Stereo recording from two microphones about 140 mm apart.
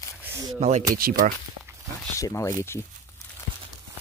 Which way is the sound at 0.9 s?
85° right.